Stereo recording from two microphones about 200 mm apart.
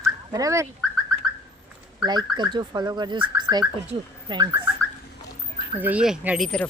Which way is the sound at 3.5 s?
5° right (ahead or behind).